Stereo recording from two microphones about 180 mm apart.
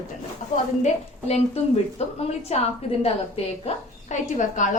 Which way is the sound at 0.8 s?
35° left (ahead or behind).